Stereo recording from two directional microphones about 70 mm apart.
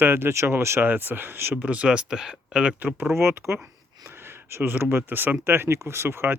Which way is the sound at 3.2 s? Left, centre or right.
Right.